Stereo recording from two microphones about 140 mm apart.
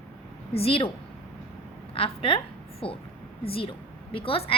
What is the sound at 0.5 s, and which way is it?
Speech, 40° left (ahead or behind).